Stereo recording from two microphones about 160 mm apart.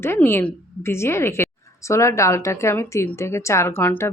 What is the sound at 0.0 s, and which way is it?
Speech, 15° left (ahead or behind).